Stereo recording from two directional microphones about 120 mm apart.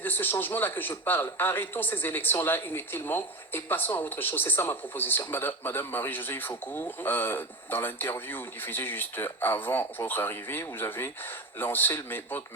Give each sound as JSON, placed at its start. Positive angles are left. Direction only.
{"t": 0.0, "sound": "a man's voice", "side_deg": 15}